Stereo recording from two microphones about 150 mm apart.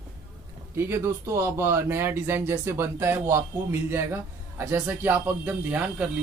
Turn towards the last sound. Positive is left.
turn(degrees=-10)  # may be behind; listen again after turning